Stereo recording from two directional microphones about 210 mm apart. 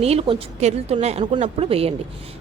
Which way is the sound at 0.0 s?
30° right (ahead or behind).